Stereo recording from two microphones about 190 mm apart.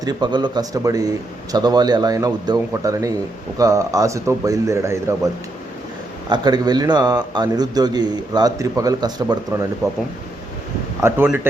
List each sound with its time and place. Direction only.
0.0 s a man's voice: 20° right (ahead or behind)
11.0 s speech: 10° right (ahead or behind)